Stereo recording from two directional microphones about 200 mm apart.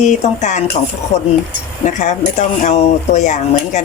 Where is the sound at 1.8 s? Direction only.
35° left (ahead or behind).